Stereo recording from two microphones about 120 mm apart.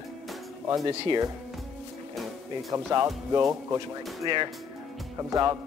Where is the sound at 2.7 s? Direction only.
25° right (ahead or behind).